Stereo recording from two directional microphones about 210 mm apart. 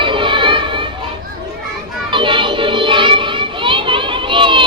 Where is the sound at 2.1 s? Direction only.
25° right (ahead or behind).